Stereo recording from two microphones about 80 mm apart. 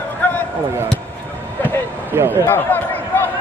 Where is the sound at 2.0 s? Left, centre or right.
Right.